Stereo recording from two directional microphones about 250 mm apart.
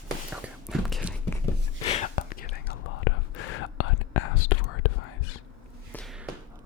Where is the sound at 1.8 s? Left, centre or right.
Left.